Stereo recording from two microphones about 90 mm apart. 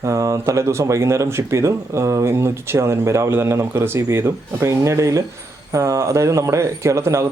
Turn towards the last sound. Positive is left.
turn(degrees=-30)  # may be behind; listen again after turning